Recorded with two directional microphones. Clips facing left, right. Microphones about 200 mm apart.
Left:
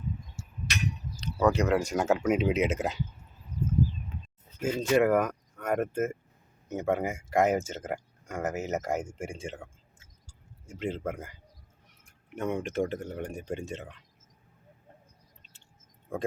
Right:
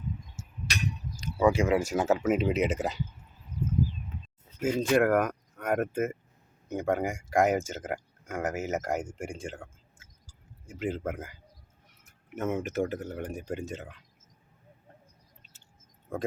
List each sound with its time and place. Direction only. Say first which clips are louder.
0.4 s tick-tock: left 1 dB; 20° right (ahead or behind)
1.2 s speech: right 1 dB; 10° right (ahead or behind)
4.6 s speech: even; 5° right (ahead or behind)
10.7 s speech: right 1 dB; 5° right (ahead or behind)